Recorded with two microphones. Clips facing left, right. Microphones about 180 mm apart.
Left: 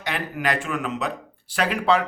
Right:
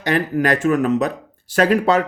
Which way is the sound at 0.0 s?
45° right (ahead or behind).